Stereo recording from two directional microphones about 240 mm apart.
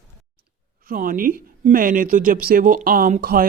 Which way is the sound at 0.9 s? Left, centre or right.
Right.